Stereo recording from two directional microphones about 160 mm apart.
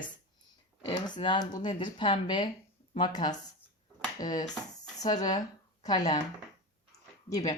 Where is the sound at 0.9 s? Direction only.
30° left (ahead or behind).